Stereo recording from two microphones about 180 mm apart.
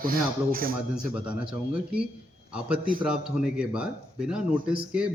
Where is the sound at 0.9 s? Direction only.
5° right (ahead or behind).